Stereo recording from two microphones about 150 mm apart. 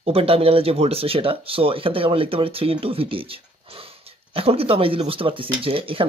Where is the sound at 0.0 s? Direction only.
40° right (ahead or behind).